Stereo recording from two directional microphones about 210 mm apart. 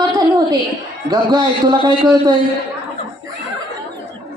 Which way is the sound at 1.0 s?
20° right (ahead or behind).